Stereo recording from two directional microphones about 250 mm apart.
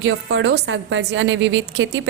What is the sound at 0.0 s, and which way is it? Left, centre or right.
A woman's voice, right.